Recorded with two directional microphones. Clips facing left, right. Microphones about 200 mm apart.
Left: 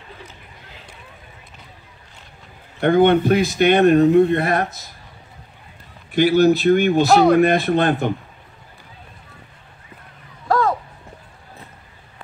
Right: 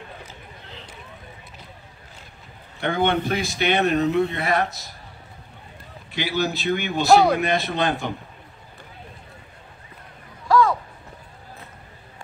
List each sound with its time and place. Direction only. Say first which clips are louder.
0.2 s a sound: even; centre (ahead or behind)
2.8 s speech: left 8 dB; 50° left (ahead or behind)
6.1 s a man's voice: left 11 dB; 55° left (ahead or behind)
7.1 s speech: even; centre (ahead or behind)
7.3 s speech: left 8 dB; 55° left (ahead or behind)